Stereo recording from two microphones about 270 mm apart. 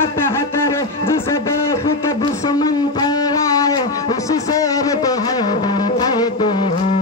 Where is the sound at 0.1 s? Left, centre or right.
Centre.